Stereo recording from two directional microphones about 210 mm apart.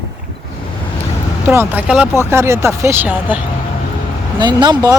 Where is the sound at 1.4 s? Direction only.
10° right (ahead or behind).